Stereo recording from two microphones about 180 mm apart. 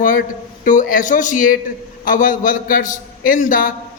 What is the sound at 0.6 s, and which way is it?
A man's voice, 50° left (ahead or behind).